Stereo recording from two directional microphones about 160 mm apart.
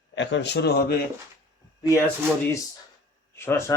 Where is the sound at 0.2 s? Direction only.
90° left.